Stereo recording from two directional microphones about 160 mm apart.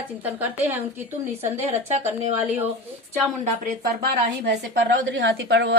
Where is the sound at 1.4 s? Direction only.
40° right (ahead or behind).